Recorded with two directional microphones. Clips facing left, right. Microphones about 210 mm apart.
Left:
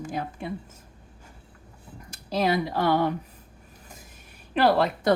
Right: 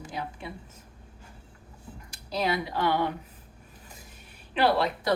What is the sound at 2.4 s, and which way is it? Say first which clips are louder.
Speech: left 4 dB; 40° left (ahead or behind).